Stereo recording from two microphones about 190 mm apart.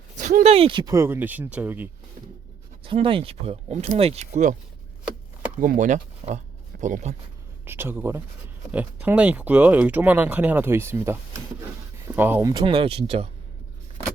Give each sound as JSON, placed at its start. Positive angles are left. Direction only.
{"t": 0.2, "sound": "speech", "side_deg": -40}
{"t": 2.8, "sound": "speech", "side_deg": -30}
{"t": 5.5, "sound": "speech", "side_deg": -40}
{"t": 7.6, "sound": "speech", "side_deg": -10}
{"t": 12.6, "sound": "speech", "side_deg": -30}